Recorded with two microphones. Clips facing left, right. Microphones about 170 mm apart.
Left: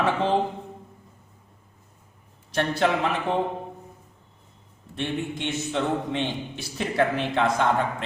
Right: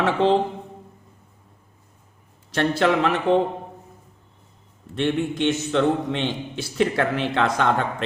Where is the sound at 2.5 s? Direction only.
90° right.